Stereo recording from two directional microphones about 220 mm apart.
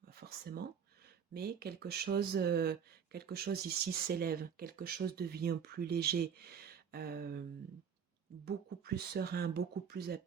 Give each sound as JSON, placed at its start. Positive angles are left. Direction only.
{"t": 0.2, "sound": "speech", "side_deg": -45}
{"t": 8.4, "sound": "speech", "side_deg": -45}